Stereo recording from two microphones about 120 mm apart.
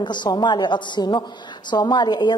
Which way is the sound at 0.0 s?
40° left (ahead or behind).